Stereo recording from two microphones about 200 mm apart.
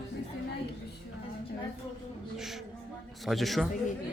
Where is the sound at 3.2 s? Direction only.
Centre (ahead or behind).